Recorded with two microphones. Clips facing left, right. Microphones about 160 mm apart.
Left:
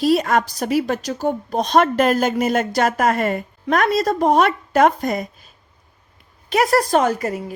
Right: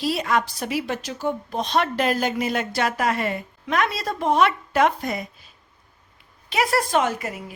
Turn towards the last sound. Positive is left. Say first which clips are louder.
# left 6 dB
turn(degrees=40)  # may be behind; listen again after turning